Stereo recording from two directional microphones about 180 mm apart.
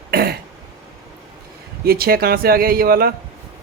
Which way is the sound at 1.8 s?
60° right (ahead or behind).